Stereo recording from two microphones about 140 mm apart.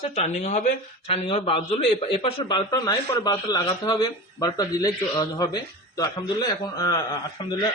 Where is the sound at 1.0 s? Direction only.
45° left (ahead or behind); by 7.0 s 30° left (ahead or behind).